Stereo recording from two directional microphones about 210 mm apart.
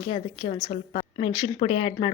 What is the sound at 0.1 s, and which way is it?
Speech, 25° left (ahead or behind).